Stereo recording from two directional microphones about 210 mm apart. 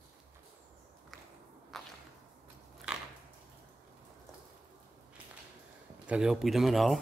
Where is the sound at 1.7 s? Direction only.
Centre (ahead or behind).